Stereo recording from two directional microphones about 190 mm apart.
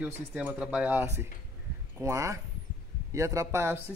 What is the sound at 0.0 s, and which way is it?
Speech, 5° right (ahead or behind).